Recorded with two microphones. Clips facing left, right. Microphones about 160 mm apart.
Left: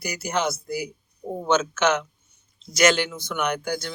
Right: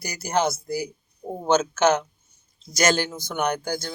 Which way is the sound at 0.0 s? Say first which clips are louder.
Right 2 dB; 40° right (ahead or behind).